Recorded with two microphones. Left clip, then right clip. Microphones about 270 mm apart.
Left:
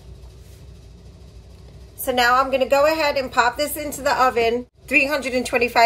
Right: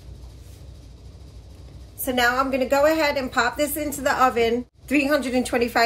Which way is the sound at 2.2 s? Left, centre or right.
Centre.